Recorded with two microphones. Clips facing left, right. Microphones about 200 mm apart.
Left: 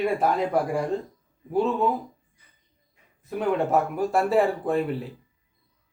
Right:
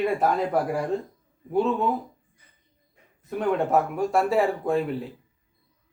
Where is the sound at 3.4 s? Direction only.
Centre (ahead or behind).